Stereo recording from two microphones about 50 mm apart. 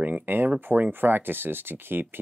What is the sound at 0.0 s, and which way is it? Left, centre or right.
Speech, right.